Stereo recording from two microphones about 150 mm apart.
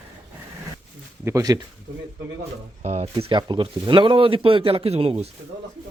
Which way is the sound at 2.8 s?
45° right (ahead or behind).